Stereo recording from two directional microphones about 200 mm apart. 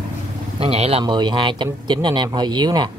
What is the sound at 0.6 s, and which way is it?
Speech, 30° right (ahead or behind).